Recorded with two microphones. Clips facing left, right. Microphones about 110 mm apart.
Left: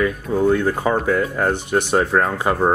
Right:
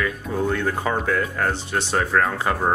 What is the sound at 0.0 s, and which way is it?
Speech, 15° left (ahead or behind).